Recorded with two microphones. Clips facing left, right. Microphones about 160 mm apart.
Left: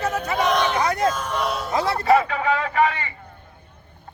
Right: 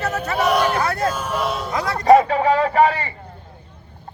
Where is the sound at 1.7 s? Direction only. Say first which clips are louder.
Left 1 dB; 30° left (ahead or behind).